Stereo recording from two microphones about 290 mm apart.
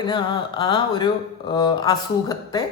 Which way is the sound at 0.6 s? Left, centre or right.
Centre.